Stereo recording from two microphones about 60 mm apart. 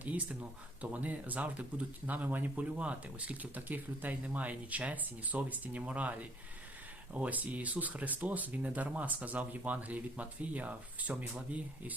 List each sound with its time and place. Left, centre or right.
0.0 s speech: right